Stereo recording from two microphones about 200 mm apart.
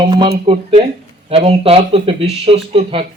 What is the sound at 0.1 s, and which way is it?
Speech, 25° right (ahead or behind).